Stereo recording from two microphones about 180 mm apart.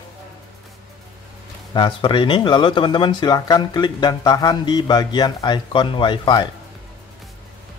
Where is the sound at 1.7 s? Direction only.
25° left (ahead or behind).